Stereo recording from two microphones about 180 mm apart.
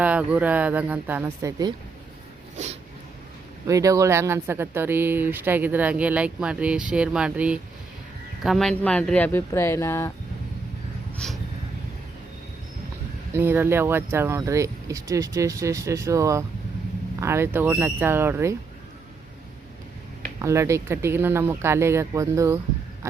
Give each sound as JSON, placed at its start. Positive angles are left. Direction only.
{"t": 0.0, "sound": "speech", "side_deg": -10}
{"t": 3.7, "sound": "speech", "side_deg": -20}
{"t": 11.2, "sound": "speech", "side_deg": 0}
{"t": 13.3, "sound": "speech", "side_deg": -10}
{"t": 20.4, "sound": "speech", "side_deg": -15}